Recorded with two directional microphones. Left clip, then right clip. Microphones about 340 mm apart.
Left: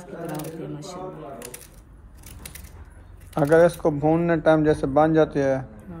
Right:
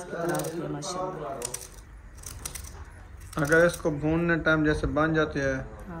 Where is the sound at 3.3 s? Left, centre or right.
Centre.